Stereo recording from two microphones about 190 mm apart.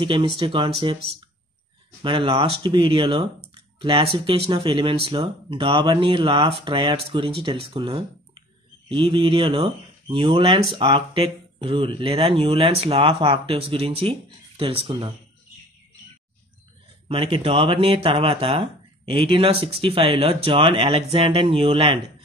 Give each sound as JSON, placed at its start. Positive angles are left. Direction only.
{"t": 0.0, "sound": "speech", "side_deg": -25}
{"t": 2.0, "sound": "speech", "side_deg": -30}
{"t": 17.1, "sound": "speech", "side_deg": -30}